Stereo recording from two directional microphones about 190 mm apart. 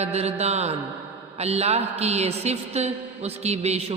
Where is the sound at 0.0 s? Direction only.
35° right (ahead or behind).